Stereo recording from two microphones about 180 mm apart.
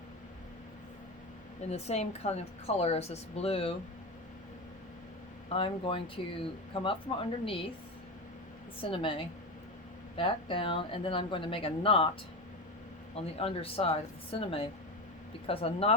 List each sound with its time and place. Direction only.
1.7 s a woman's voice: 35° left (ahead or behind)
5.5 s a woman's voice: 30° left (ahead or behind)
8.8 s speech: 30° left (ahead or behind)
13.1 s a woman's voice: 35° left (ahead or behind)